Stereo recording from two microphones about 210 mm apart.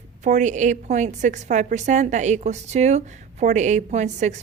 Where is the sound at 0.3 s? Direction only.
35° right (ahead or behind).